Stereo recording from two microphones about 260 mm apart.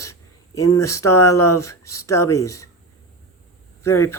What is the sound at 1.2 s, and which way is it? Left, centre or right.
Speech, centre.